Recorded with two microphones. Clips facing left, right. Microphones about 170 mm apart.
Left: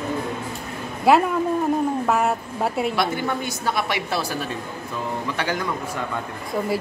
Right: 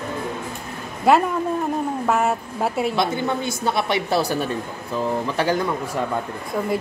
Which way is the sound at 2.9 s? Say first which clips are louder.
Right 2 dB; 20° right (ahead or behind).